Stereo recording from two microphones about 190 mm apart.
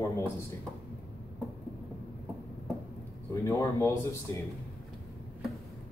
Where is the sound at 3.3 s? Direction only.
15° left (ahead or behind).